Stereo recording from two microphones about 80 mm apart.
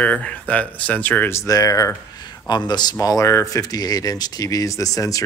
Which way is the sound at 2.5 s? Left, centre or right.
Left.